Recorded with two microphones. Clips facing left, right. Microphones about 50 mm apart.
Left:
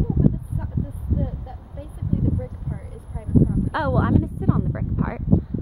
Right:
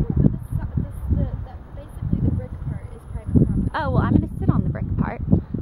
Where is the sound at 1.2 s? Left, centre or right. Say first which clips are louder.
Even; centre.